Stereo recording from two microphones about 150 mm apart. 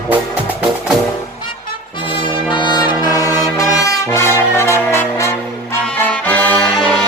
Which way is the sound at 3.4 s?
25° left (ahead or behind).